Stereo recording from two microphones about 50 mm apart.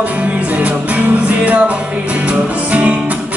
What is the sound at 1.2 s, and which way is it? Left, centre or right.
Music, right.